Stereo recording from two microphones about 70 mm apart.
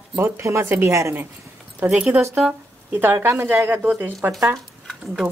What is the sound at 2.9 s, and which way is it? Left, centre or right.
Speech, right.